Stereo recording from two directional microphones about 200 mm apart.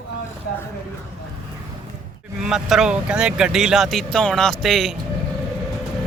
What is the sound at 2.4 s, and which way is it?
Speech, 5° right (ahead or behind).